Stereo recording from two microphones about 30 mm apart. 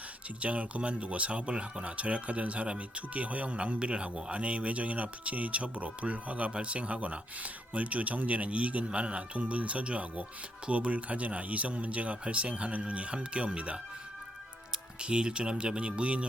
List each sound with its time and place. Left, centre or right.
0.3 s speech: right
3.8 s speech: right
6.5 s speech: right
15.0 s speech: right